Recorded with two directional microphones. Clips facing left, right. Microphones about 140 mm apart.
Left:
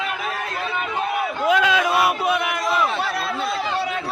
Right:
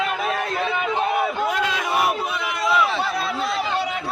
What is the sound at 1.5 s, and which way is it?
Crowd, 90° left.